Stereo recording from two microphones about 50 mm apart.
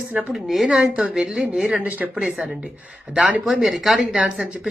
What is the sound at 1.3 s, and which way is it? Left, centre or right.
Speech, centre.